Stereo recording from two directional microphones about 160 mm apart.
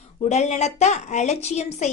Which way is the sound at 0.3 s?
45° left (ahead or behind).